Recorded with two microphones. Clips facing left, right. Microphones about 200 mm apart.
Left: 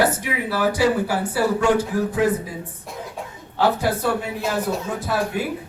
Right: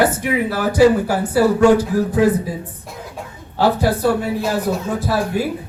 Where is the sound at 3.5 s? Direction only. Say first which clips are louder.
Right 4 dB; 35° right (ahead or behind).